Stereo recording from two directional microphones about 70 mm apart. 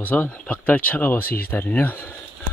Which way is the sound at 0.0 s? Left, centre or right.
Left.